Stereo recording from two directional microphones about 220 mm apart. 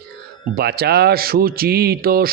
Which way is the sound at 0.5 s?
45° right (ahead or behind).